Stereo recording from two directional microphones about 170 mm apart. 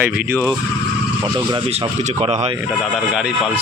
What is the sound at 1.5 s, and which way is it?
Speech, 30° right (ahead or behind).